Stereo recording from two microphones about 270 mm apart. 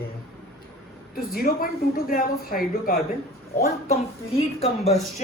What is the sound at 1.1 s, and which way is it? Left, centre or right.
A woman's voice, left.